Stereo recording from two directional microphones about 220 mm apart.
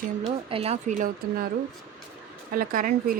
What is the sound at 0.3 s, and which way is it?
Speech, 25° right (ahead or behind).